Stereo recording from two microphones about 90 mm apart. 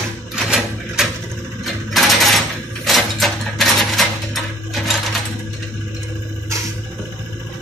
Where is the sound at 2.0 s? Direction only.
Centre (ahead or behind).